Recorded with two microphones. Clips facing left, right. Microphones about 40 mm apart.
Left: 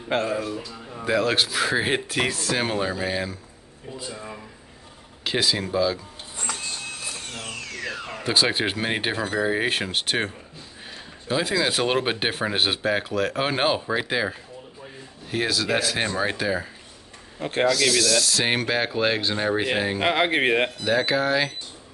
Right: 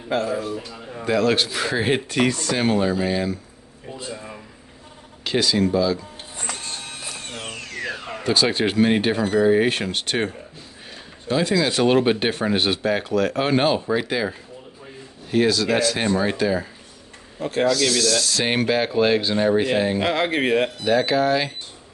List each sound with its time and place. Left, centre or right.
0.1 s speech: left
1.0 s speech: centre
5.2 s speech: centre
7.3 s tools: right
8.2 s speech: centre
17.6 s speech: centre
20.0 s speech: centre
20.8 s speech: centre